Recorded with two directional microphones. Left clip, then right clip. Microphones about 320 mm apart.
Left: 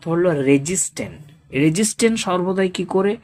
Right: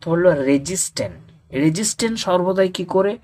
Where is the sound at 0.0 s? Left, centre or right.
Centre.